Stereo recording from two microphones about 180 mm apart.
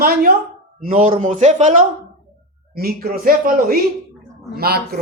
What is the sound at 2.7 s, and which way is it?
Speech, 55° right (ahead or behind).